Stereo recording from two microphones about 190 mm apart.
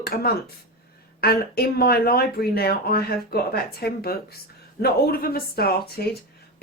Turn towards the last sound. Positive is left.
turn(degrees=55)  # may be behind; listen again after turning